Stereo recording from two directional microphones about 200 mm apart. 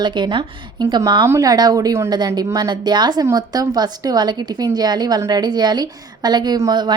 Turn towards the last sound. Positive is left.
turn(degrees=-20)  # may be behind; listen again after turning